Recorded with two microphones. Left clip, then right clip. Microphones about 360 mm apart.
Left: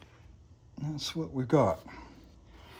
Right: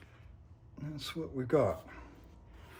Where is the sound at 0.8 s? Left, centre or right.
Centre.